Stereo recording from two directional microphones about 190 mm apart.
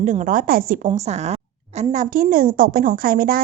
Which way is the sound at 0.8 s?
35° right (ahead or behind).